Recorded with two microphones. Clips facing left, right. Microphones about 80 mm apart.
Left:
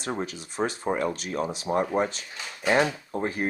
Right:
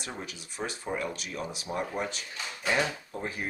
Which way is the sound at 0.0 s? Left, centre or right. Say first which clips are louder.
Left 9 dB; left.